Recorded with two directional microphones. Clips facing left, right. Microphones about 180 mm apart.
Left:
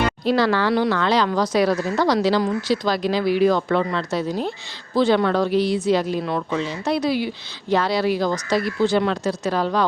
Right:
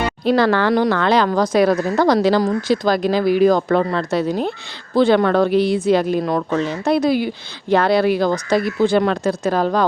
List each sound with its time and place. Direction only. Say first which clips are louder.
0.3 s speech: right 4 dB; 55° right (ahead or behind)
4.1 s speech: right 4 dB; 60° right (ahead or behind)